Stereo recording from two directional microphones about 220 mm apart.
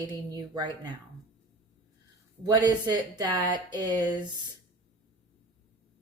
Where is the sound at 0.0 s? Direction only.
15° right (ahead or behind).